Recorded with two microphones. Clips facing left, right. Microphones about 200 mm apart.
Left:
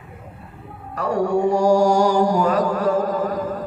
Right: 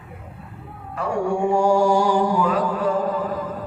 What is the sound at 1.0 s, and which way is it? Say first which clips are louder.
Mantra: left 3 dB; 40° left (ahead or behind).